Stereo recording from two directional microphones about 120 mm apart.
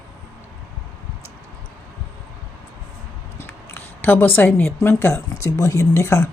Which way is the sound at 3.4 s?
15° left (ahead or behind).